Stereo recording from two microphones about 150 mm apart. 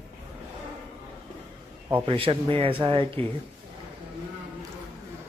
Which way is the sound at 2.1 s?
35° right (ahead or behind).